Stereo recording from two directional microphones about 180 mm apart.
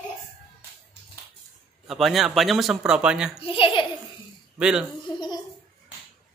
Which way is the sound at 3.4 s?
30° left (ahead or behind).